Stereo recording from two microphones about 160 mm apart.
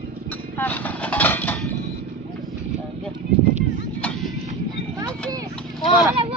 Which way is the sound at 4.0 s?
10° left (ahead or behind).